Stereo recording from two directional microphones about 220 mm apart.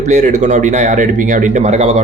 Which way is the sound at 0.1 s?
30° right (ahead or behind).